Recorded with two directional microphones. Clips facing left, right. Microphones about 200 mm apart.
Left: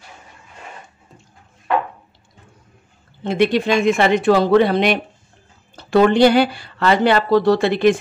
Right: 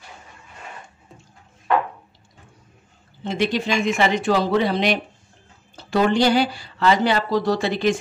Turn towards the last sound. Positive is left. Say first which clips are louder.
# left 6 dB
turn(degrees=60)  # may be behind; listen again after turning